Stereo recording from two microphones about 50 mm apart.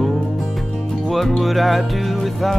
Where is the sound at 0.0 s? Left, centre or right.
Centre.